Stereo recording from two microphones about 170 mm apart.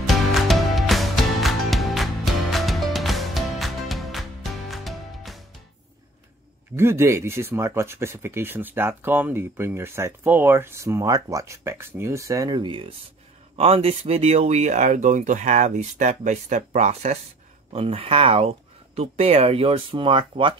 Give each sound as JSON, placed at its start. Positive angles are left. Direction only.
{"t": 0.0, "sound": "music", "side_deg": 0}
{"t": 6.8, "sound": "speech", "side_deg": -15}